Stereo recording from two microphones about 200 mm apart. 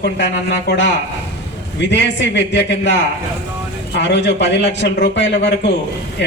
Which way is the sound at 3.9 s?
60° left (ahead or behind).